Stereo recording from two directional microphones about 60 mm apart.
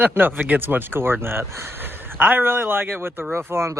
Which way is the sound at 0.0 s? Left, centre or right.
Right.